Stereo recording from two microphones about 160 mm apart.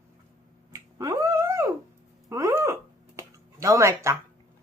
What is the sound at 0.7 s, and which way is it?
Finger snapping, 20° right (ahead or behind).